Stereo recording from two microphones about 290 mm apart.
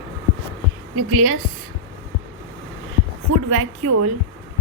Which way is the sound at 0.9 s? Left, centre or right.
Right.